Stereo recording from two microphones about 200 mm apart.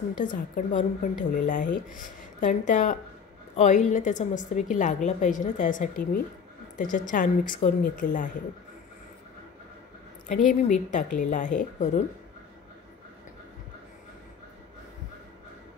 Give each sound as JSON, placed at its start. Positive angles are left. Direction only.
{"t": 0.6, "sound": "a woman's voice", "side_deg": 40}
{"t": 10.2, "sound": "a woman's voice", "side_deg": 40}